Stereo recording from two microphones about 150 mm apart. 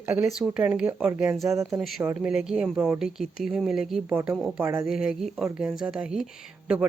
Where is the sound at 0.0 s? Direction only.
10° right (ahead or behind).